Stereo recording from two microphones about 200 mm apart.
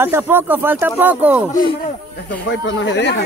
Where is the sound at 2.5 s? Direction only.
70° left (ahead or behind).